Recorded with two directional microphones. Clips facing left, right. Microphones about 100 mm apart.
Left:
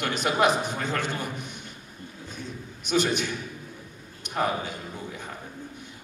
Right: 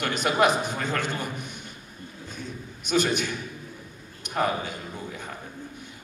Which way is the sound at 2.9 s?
20° left (ahead or behind).